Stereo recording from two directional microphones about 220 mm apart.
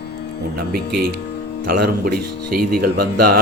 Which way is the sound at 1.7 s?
40° right (ahead or behind).